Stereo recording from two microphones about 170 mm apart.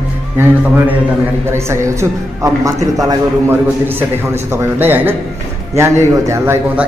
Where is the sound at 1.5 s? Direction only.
15° right (ahead or behind).